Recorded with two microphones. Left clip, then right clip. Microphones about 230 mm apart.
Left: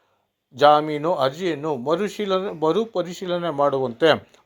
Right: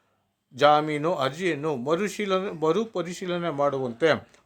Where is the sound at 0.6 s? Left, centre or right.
Centre.